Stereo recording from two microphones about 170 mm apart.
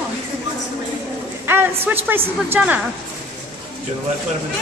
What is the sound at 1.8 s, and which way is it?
Speech, 10° right (ahead or behind).